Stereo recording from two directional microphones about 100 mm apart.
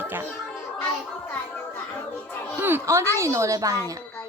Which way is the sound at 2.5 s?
20° right (ahead or behind).